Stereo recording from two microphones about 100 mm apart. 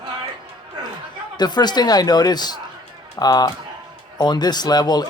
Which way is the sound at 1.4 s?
45° left (ahead or behind).